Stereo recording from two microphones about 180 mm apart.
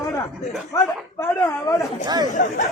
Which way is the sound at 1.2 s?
15° left (ahead or behind).